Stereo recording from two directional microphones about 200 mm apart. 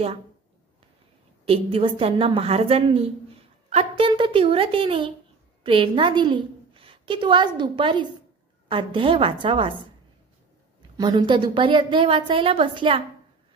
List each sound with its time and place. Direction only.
1.4 s a woman's voice: 30° right (ahead or behind)
11.0 s a woman's voice: 20° right (ahead or behind)